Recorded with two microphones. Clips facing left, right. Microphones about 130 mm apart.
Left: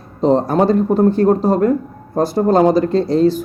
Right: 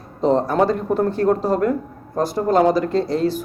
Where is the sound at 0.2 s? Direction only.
30° left (ahead or behind).